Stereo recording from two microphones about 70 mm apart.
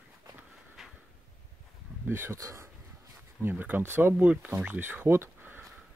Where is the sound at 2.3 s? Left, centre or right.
Right.